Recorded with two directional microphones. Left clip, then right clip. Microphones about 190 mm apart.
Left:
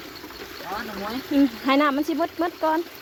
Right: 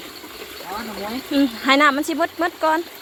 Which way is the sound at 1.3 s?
10° left (ahead or behind).